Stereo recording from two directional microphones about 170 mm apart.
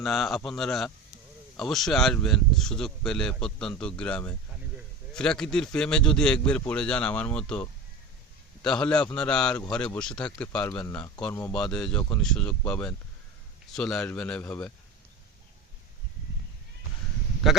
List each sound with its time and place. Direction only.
0.0 s speech: centre (ahead or behind); by 11.1 s 15° left (ahead or behind)
11.5 s speech: 5° left (ahead or behind)